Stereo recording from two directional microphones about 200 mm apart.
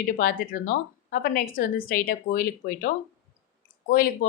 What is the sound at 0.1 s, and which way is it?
Speech, 45° left (ahead or behind).